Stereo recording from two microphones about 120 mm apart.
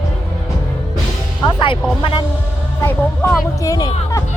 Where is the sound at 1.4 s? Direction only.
40° left (ahead or behind).